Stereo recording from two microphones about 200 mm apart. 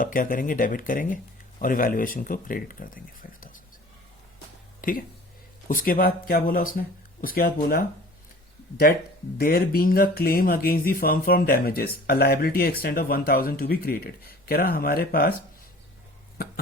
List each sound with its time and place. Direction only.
0.0 s speech: 45° left (ahead or behind)
4.8 s speech: 45° left (ahead or behind)
8.9 s speech: 45° left (ahead or behind)